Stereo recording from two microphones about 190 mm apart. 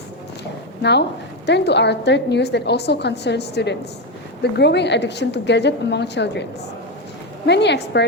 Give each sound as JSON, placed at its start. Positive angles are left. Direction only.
{"t": 0.8, "sound": "a woman's voice", "side_deg": 60}